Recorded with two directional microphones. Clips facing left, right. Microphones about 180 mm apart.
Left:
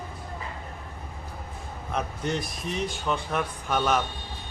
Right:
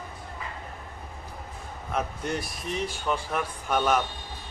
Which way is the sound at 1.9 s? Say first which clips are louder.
Left 1 dB; 5° right (ahead or behind).